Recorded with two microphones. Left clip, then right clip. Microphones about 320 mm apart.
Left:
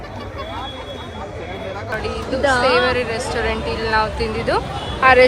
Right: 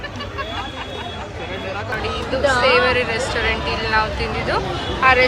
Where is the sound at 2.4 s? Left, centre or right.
Left.